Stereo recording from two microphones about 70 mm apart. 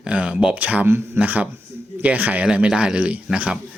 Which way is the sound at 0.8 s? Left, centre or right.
Right.